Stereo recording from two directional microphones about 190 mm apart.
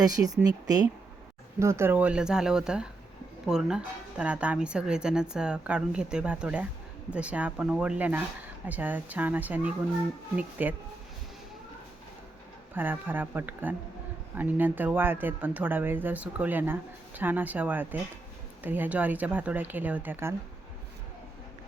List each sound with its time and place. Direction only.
0.0 s a woman's voice: 20° right (ahead or behind)
12.7 s speech: 10° right (ahead or behind)